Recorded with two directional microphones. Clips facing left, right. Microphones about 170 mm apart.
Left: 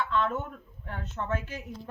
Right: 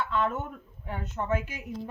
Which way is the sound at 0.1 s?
10° right (ahead or behind).